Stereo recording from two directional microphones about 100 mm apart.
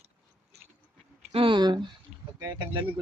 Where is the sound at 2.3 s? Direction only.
40° right (ahead or behind).